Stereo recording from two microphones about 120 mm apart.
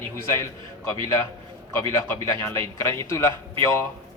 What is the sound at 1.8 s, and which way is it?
A man's voice, 20° left (ahead or behind).